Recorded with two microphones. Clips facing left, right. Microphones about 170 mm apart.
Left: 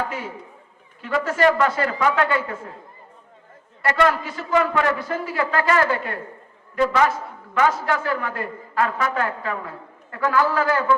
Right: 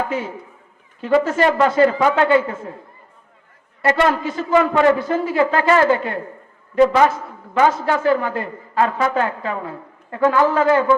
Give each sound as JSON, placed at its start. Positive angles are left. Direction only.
{"t": 1.0, "sound": "a man's voice", "side_deg": -25}
{"t": 3.8, "sound": "a man's voice", "side_deg": -25}